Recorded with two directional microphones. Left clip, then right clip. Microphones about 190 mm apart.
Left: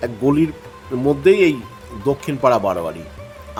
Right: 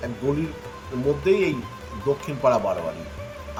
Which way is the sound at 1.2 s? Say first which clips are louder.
Left 9 dB; 55° left (ahead or behind).